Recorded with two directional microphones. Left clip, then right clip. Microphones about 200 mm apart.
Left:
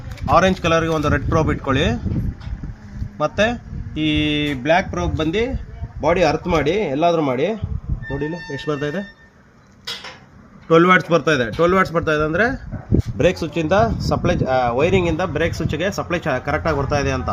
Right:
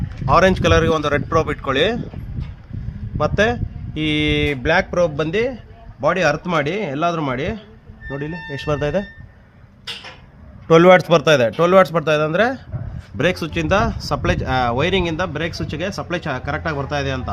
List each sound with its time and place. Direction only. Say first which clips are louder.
0.3 s speech: right 1 dB; 15° right (ahead or behind)
3.2 s a man's voice: right 1 dB; 20° right (ahead or behind)
10.7 s a man's voice: right 3 dB; 35° right (ahead or behind); by 17.2 s centre (ahead or behind)